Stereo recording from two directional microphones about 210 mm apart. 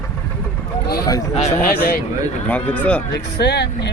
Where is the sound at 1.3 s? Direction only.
35° left (ahead or behind).